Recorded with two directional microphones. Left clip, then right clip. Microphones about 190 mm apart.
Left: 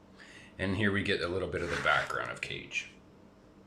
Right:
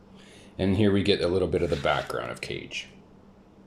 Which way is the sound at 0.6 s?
20° right (ahead or behind).